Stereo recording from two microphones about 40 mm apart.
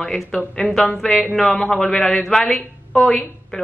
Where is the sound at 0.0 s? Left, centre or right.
Centre.